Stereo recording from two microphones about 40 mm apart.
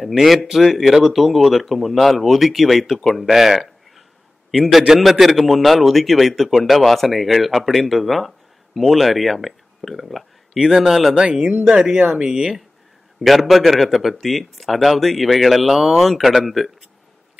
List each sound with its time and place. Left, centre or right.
0.0 s a man's voice: centre
11.1 s speech: right
12.3 s speech: centre
13.2 s speech: centre